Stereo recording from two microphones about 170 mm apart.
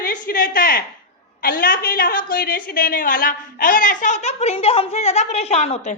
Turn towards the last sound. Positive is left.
turn(degrees=40)  # may be behind; listen again after turning